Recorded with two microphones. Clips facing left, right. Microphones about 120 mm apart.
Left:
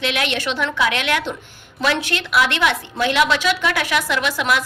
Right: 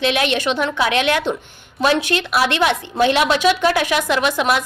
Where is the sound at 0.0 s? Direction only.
25° right (ahead or behind).